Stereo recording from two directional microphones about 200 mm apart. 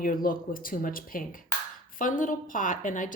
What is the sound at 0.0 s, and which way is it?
Speech, 45° left (ahead or behind).